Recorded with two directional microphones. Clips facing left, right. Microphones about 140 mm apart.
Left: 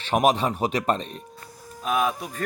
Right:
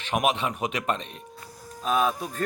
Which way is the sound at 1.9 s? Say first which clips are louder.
Even; 5° left (ahead or behind).